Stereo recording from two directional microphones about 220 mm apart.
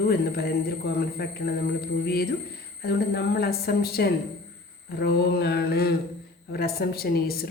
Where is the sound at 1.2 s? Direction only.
45° left (ahead or behind).